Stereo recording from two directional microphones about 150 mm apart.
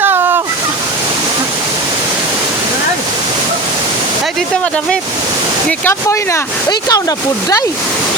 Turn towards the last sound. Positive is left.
turn(degrees=25)  # may be behind; listen again after turning